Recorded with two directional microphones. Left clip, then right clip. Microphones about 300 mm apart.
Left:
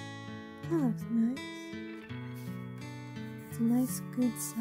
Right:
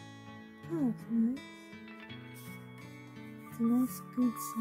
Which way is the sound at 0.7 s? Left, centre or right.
Centre.